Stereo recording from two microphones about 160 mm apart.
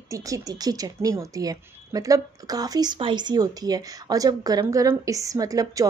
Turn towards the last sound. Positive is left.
turn(degrees=-20)  # may be behind; listen again after turning